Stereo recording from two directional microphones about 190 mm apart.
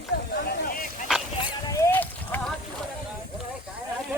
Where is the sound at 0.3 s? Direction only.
50° left (ahead or behind).